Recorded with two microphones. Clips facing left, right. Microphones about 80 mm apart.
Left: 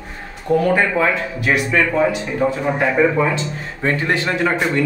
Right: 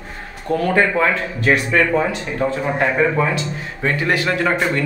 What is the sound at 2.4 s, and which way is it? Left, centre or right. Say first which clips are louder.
Speech: even; centre.